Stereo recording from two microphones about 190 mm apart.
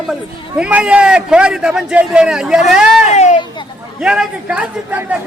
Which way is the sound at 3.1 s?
35° left (ahead or behind).